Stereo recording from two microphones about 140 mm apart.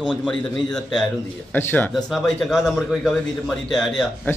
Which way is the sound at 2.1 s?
Centre (ahead or behind).